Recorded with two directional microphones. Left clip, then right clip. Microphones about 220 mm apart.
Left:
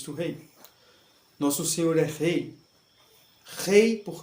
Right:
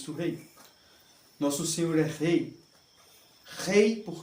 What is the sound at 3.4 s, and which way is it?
Speech, 45° left (ahead or behind).